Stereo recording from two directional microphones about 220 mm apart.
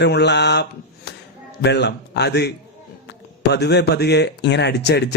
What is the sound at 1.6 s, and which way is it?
Speech, 50° left (ahead or behind).